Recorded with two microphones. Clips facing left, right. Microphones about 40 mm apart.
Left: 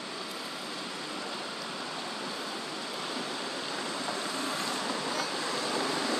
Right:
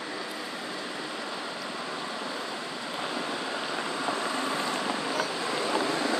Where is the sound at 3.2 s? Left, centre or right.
Right.